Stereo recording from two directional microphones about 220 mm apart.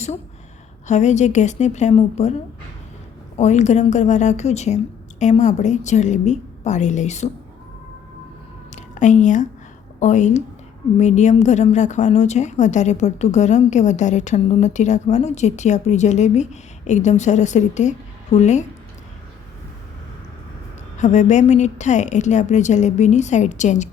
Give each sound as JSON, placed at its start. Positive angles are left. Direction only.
{"t": 0.9, "sound": "a woman's voice", "side_deg": 30}
{"t": 3.3, "sound": "a woman's voice", "side_deg": 30}
{"t": 8.7, "sound": "a sound", "side_deg": 35}
{"t": 10.0, "sound": "a woman's voice", "side_deg": 35}
{"t": 21.0, "sound": "a woman's voice", "side_deg": 30}